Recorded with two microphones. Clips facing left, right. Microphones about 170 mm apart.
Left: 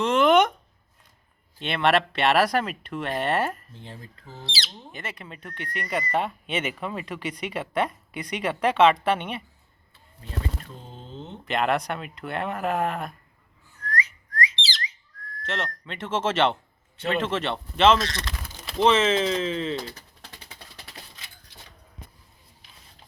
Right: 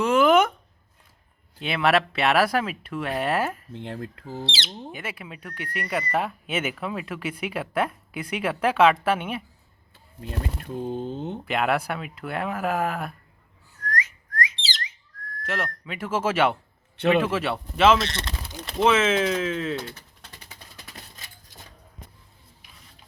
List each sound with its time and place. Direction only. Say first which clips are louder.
0.0 s a sound: right 1 dB; 5° right (ahead or behind)
1.5 s speech: even; 5° right (ahead or behind)
3.7 s speech: right 9 dB; 65° right (ahead or behind)
4.4 s speech: right 5 dB; 30° right (ahead or behind)
4.9 s speech: even; 10° right (ahead or behind)
10.2 s speech: right 2 dB; 60° right (ahead or behind)
11.4 s speech: left 1 dB; 5° right (ahead or behind)
13.8 s whistling: even; 45° right (ahead or behind)
15.4 s speech: right 1 dB; 10° right (ahead or behind)
18.0 s speech: right 1 dB; 25° right (ahead or behind)
18.5 s speech: even; centre (ahead or behind)